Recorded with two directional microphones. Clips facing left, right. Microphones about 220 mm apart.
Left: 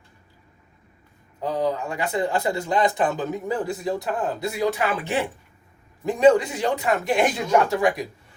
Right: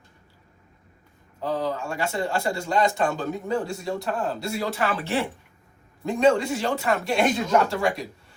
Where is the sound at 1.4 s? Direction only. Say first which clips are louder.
Left 2 dB; 15° left (ahead or behind).